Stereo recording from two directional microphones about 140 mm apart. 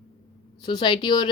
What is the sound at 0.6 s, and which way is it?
Speech, 35° left (ahead or behind).